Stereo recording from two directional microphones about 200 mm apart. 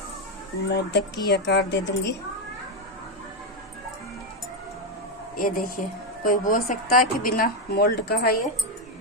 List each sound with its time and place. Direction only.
0.7 s a woman's voice: 60° left (ahead or behind)
5.4 s a woman's voice: 45° left (ahead or behind)